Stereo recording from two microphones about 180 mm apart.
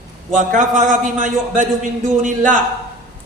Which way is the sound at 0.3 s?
45° right (ahead or behind).